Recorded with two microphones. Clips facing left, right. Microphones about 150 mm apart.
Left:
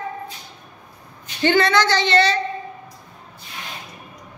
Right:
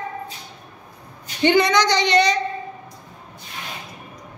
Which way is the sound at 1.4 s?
15° right (ahead or behind).